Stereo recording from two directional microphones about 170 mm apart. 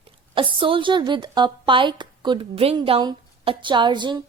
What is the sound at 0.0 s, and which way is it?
A woman's voice, 30° right (ahead or behind).